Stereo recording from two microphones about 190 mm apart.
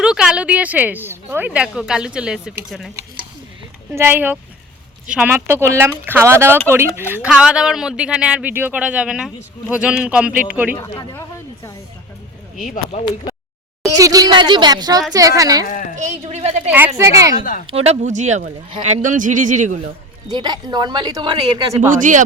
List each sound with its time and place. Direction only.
0.0 s speech: 5° right (ahead or behind)
3.9 s speech: 10° right (ahead or behind)
10.8 s speech: 25° left (ahead or behind)
11.1 s a sound: 15° left (ahead or behind)
13.8 s speech: 20° right (ahead or behind)
15.6 s a woman's voice: 45° left (ahead or behind)
16.0 s speech: 35° right (ahead or behind)
16.6 s speech: 10° right (ahead or behind)
17.7 s speech: 35° right (ahead or behind)
20.2 s speech: 20° right (ahead or behind)